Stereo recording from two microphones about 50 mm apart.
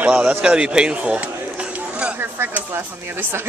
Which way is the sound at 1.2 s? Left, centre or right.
Right.